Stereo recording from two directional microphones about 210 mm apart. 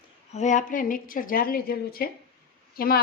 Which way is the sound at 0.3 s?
35° left (ahead or behind).